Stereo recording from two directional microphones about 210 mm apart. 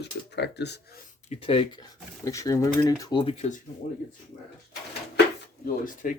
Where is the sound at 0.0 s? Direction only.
55° left (ahead or behind).